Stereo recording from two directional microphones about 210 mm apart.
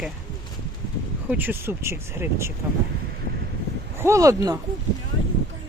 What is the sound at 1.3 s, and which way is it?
Speech, 10° right (ahead or behind).